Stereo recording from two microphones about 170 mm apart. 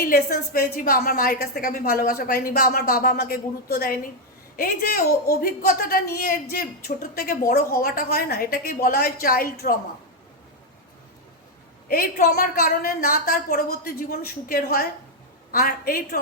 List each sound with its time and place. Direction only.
0.0 s a woman's voice: 65° left (ahead or behind)
11.9 s a woman's voice: 60° left (ahead or behind)